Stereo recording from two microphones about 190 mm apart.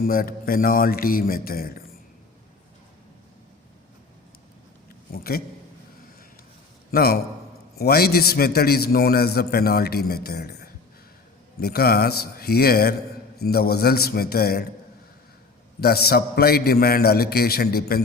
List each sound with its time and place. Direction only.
0.0 s a man's voice: 50° left (ahead or behind)
5.1 s a man's voice: 50° left (ahead or behind)
6.9 s a man's voice: 55° left (ahead or behind)
15.8 s a man's voice: 55° left (ahead or behind)